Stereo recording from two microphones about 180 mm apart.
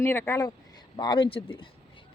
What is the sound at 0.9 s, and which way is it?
Speech, 25° left (ahead or behind).